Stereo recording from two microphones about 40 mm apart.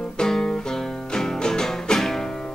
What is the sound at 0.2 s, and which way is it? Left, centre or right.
Music, centre.